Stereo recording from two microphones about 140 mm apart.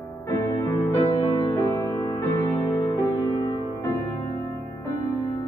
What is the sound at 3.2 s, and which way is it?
Music, 35° left (ahead or behind).